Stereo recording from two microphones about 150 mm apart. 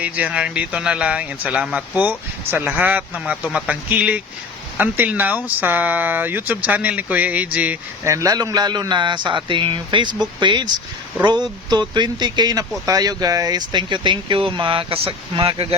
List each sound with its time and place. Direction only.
0.0 s speech: 10° right (ahead or behind)
8.0 s speech: 20° right (ahead or behind); by 15.6 s 40° right (ahead or behind)